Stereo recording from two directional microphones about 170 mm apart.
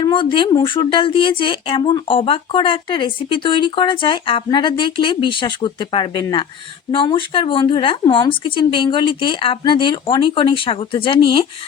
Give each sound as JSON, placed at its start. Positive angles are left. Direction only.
{"t": 0.0, "sound": "speech", "side_deg": 30}